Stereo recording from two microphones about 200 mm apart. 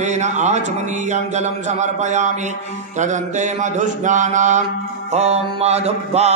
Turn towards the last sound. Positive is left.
turn(degrees=-30)  # may be behind; listen again after turning